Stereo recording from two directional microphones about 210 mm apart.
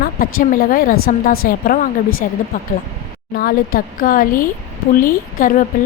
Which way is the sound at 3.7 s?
40° left (ahead or behind).